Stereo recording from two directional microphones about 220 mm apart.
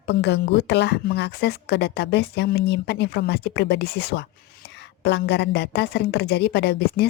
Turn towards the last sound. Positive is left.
turn(degrees=45)  # may be behind; listen again after turning